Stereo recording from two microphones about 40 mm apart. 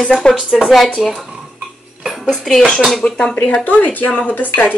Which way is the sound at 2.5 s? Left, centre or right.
Centre.